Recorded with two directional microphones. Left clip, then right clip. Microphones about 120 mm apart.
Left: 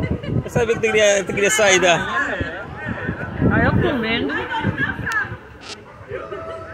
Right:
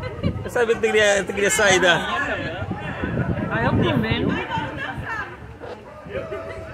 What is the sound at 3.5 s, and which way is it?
Speech, 5° right (ahead or behind).